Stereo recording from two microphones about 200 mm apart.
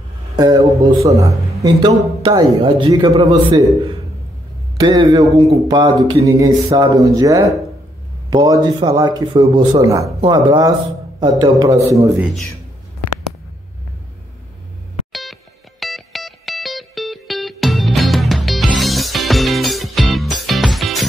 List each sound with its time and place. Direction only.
0.4 s a man's voice: 15° right (ahead or behind)
4.7 s a man's voice: 20° right (ahead or behind)
15.8 s music: centre (ahead or behind)